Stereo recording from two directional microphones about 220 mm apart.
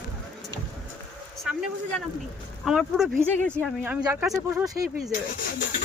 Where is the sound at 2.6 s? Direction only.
Centre (ahead or behind).